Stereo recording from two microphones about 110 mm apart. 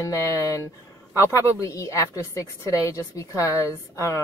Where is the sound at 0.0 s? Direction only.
30° left (ahead or behind).